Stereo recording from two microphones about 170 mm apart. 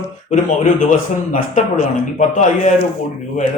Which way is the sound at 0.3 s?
50° left (ahead or behind).